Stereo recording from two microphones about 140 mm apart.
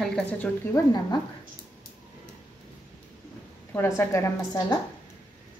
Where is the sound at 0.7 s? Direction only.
30° left (ahead or behind).